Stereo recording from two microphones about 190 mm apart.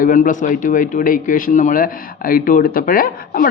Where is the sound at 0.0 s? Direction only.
45° left (ahead or behind).